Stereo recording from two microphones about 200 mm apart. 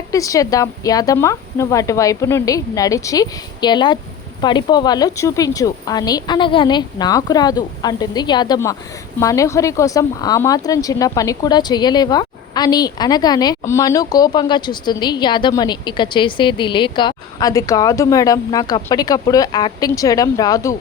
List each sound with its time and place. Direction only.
0.1 s speech: 15° left (ahead or behind)